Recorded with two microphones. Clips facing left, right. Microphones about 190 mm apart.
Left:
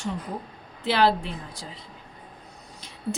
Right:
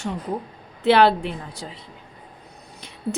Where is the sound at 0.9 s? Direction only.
60° right (ahead or behind).